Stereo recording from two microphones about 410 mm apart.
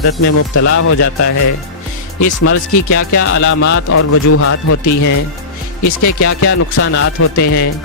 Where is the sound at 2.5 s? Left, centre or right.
Left.